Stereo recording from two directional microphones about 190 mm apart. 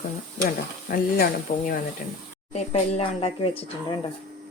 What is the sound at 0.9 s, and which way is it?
Speech, 45° left (ahead or behind).